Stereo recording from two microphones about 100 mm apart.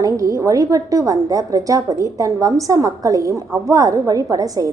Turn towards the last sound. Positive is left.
turn(degrees=-35)  # may be behind; listen again after turning